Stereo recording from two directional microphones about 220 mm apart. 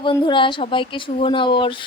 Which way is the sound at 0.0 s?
20° left (ahead or behind).